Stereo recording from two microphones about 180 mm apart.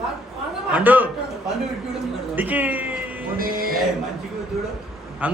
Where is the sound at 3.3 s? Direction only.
55° right (ahead or behind).